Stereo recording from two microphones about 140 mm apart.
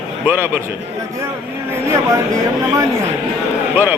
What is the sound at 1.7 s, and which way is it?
Speech, 20° right (ahead or behind).